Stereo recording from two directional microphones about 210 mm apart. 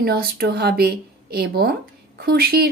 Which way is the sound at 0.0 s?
45° right (ahead or behind).